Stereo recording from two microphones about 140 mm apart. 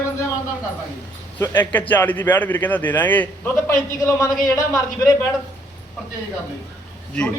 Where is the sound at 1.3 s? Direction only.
15° left (ahead or behind).